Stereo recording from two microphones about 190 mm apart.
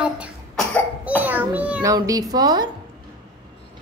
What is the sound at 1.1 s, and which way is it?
A woman's voice, 10° right (ahead or behind).